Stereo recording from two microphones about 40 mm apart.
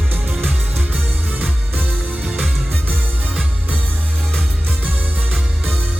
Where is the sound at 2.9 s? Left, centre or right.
Right.